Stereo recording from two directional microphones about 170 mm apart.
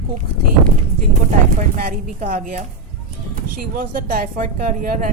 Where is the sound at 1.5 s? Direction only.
50° right (ahead or behind).